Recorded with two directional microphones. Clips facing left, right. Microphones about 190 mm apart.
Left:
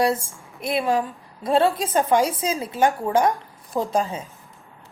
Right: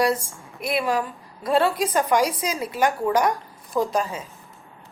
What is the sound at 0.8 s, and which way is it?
A woman's voice, 20° left (ahead or behind).